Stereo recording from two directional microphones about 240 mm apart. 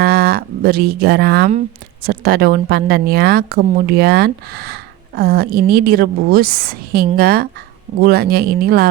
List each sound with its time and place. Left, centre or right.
0.0 s a woman's voice: right